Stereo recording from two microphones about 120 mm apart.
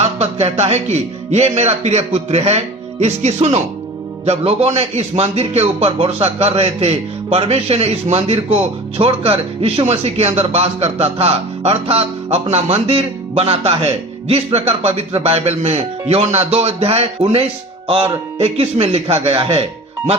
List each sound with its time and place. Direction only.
0.0 s speech: 60° right (ahead or behind)
18.4 s speech: 55° right (ahead or behind)